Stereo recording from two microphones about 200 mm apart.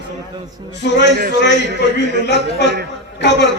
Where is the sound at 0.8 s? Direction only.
60° left (ahead or behind).